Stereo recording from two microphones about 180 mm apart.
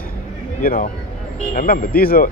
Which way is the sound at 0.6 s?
50° left (ahead or behind).